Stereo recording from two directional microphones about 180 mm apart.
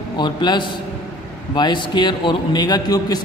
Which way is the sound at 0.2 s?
25° left (ahead or behind).